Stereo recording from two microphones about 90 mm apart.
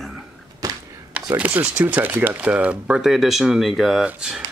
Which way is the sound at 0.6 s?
40° right (ahead or behind).